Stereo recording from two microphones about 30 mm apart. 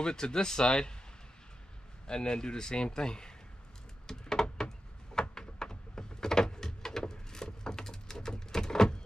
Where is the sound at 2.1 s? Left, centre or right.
Left.